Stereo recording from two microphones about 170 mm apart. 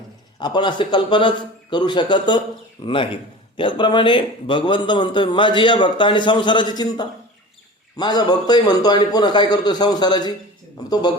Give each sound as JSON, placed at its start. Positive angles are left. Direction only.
{"t": 0.3, "sound": "a man's voice", "side_deg": 25}